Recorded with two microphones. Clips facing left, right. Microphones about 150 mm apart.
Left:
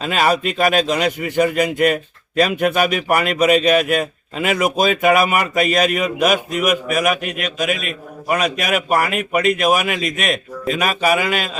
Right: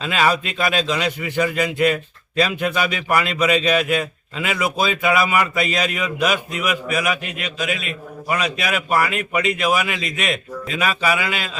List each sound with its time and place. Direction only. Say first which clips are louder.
0.0 s a man's voice: left 2 dB; 45° left (ahead or behind)